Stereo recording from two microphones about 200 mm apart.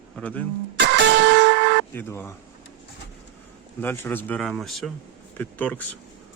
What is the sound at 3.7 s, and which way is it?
Speech, 10° left (ahead or behind).